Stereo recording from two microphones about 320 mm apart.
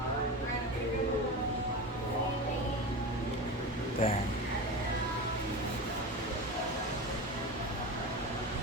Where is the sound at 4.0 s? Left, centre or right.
Centre.